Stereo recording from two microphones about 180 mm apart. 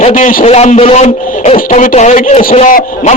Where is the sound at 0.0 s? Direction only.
35° left (ahead or behind).